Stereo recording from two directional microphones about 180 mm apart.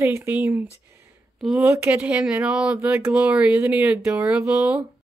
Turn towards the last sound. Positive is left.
turn(degrees=-5)  # may be behind; listen again after turning